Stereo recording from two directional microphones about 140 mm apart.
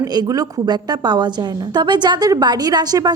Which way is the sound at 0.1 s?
30° right (ahead or behind).